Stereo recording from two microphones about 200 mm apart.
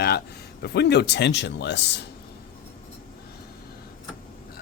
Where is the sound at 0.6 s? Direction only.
55° left (ahead or behind).